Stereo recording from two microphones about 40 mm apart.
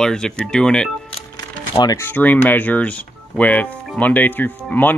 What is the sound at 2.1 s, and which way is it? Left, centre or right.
Speech, left.